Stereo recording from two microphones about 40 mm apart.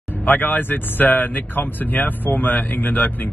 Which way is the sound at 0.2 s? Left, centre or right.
Left.